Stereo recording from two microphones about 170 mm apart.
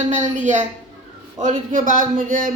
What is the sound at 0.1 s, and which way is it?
Speech, 45° right (ahead or behind).